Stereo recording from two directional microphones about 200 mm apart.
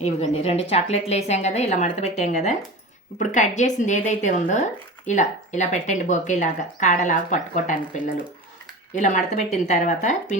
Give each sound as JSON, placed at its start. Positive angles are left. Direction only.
{"t": 0.0, "sound": "speech", "side_deg": 30}